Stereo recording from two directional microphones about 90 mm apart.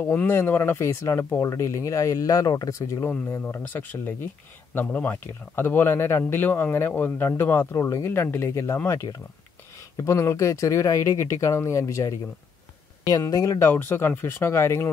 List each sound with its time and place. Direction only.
0.0 s speech: 15° left (ahead or behind)
0.3 s speech: 30° left (ahead or behind)
3.4 s speech: 20° left (ahead or behind); by 12.2 s 35° left (ahead or behind)
13.2 s speech: 35° left (ahead or behind)
13.7 s speech: 25° left (ahead or behind)